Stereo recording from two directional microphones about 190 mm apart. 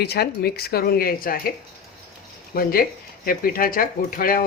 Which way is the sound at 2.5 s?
55° left (ahead or behind).